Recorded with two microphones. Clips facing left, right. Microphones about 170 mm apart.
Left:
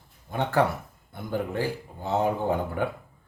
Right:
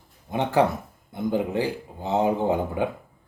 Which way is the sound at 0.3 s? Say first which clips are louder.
Right 3 dB; 20° right (ahead or behind).